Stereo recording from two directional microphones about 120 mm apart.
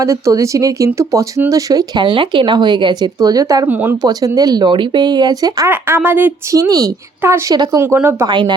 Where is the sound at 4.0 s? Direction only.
30° right (ahead or behind).